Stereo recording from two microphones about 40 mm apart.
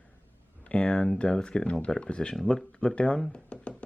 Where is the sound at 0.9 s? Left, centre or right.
Left.